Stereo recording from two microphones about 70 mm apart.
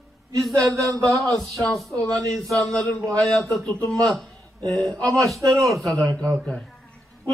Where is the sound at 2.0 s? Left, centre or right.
Right.